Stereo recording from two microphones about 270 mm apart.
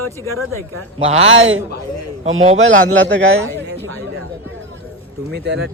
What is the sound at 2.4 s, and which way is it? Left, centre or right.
Speech, right.